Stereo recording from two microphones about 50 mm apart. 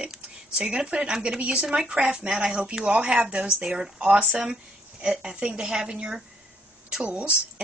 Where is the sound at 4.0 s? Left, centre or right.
Right.